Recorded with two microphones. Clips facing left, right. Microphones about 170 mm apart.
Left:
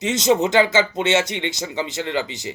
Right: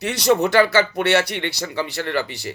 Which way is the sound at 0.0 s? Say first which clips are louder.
Even; 20° left (ahead or behind).